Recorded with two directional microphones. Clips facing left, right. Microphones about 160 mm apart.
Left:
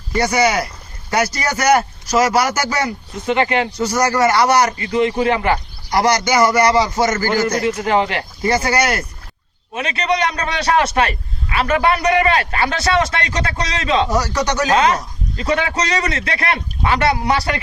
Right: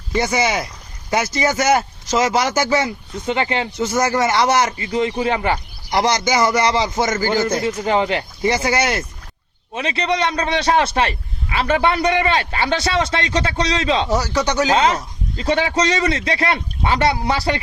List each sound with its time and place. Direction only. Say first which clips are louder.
0.2 s a man's voice: left 3 dB; 20° right (ahead or behind)